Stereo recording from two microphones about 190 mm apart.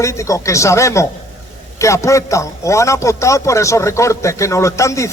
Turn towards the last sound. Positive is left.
turn(degrees=15)  # may be behind; listen again after turning